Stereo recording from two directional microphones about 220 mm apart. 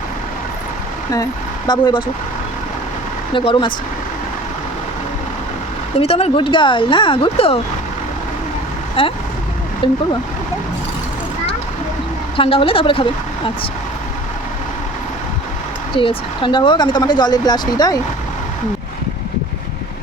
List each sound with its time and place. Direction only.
1.1 s speech: 15° left (ahead or behind)
3.3 s speech: 20° left (ahead or behind)
6.0 s speech: 25° left (ahead or behind)
9.0 s speech: 25° left (ahead or behind)
12.4 s speech: 25° left (ahead or behind)
16.0 s speech: 20° left (ahead or behind)